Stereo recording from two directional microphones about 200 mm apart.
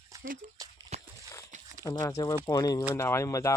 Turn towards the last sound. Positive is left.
turn(degrees=15)  # may be behind; listen again after turning